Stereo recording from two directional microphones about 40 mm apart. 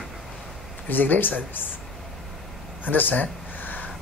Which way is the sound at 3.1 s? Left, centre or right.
Left.